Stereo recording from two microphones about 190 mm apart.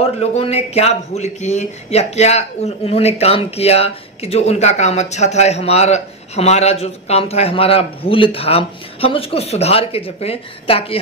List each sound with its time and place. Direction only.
0.0 s speech: 35° left (ahead or behind)